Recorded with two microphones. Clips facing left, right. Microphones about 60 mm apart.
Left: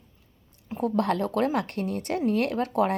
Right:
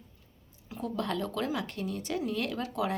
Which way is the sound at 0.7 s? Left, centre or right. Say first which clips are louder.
Left 8 dB; left.